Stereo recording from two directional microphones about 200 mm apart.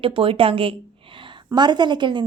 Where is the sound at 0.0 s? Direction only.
25° right (ahead or behind).